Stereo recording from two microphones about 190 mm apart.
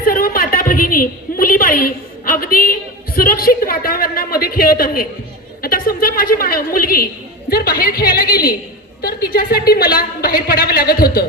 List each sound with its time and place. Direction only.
0.0 s a woman's voice: 50° left (ahead or behind)